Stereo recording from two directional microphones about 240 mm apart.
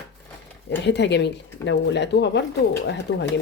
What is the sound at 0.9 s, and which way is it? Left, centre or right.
A woman's voice, left.